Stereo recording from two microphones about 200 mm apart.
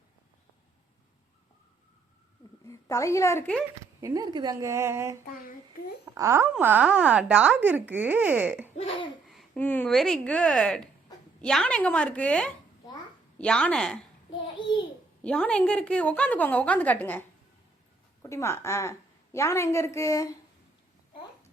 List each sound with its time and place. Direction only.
2.6 s a woman's voice: 15° left (ahead or behind)
4.0 s speech: 20° right (ahead or behind)
6.1 s a woman's voice: 15° right (ahead or behind); by 14.0 s 5° left (ahead or behind)
15.2 s a woman's voice: 5° left (ahead or behind)